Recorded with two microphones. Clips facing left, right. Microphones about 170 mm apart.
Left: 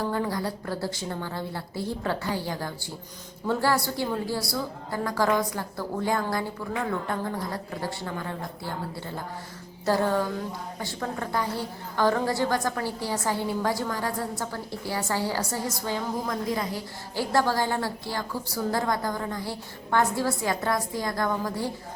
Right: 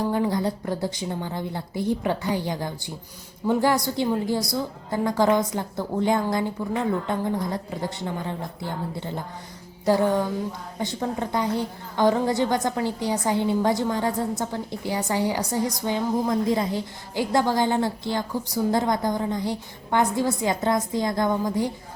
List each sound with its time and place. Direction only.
0.0 s a woman's voice: 20° right (ahead or behind)